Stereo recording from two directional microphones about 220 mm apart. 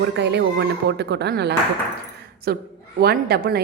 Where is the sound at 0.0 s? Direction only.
50° right (ahead or behind).